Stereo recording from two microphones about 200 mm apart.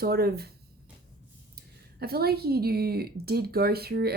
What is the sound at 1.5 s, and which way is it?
A woman's voice, 50° right (ahead or behind).